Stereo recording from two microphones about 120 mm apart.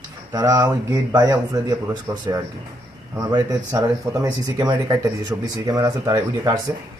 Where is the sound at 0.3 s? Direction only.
30° right (ahead or behind).